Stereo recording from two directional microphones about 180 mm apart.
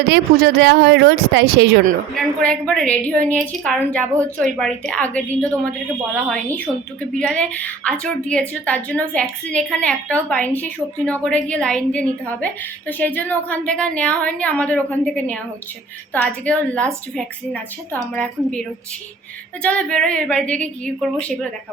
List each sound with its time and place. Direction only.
0.1 s speech: 65° right (ahead or behind)
2.1 s a woman's voice: 5° left (ahead or behind)
19.6 s a woman's voice: 5° left (ahead or behind)